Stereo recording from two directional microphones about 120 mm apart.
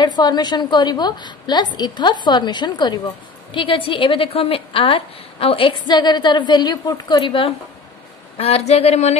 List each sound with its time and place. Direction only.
0.0 s a woman's voice: 35° left (ahead or behind)
3.5 s a woman's voice: 50° left (ahead or behind)
8.4 s speech: 60° left (ahead or behind)